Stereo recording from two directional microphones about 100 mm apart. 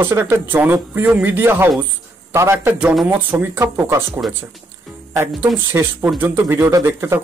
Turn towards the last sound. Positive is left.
turn(degrees=-30)  # may be behind; listen again after turning